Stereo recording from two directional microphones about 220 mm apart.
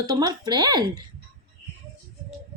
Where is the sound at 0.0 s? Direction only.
20° right (ahead or behind).